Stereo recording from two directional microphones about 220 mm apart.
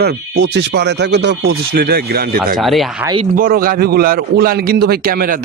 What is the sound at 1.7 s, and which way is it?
Speech, 45° right (ahead or behind).